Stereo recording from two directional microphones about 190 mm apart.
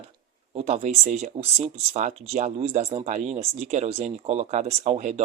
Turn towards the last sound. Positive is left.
turn(degrees=-35)  # may be behind; listen again after turning